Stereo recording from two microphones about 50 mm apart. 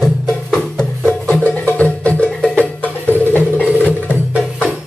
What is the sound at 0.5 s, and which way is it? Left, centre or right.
Music, centre.